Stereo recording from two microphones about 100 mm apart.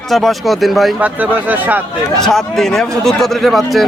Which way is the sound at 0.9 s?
15° right (ahead or behind).